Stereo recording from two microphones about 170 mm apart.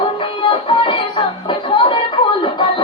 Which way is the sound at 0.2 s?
30° left (ahead or behind).